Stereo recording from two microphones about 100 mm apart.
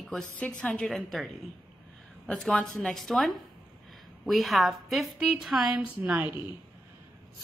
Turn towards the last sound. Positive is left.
turn(degrees=-15)  # may be behind; listen again after turning